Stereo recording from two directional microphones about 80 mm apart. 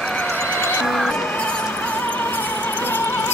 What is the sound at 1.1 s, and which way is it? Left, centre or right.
Music, centre.